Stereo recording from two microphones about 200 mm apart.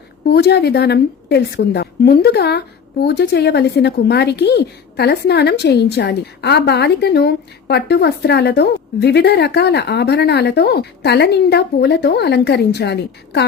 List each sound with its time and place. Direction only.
0.3 s a woman's voice: 55° left (ahead or behind)